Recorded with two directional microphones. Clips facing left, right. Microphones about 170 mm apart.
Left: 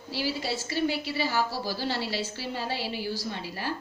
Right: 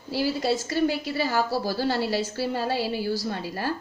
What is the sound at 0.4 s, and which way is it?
A woman's voice, 45° right (ahead or behind).